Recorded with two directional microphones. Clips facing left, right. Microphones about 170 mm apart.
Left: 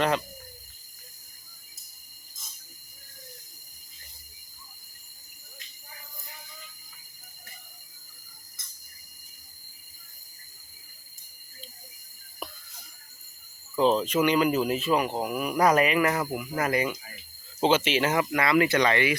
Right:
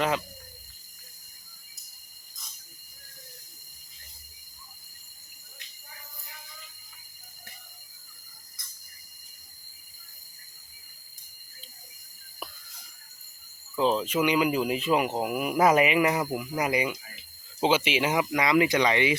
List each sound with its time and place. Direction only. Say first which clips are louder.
13.7 s speech: left 2 dB; centre (ahead or behind)